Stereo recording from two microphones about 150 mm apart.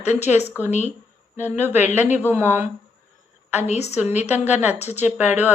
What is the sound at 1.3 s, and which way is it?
A woman's voice, 15° right (ahead or behind).